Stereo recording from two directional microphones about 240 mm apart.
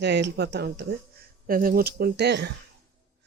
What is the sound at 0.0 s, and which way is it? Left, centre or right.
Speech, right.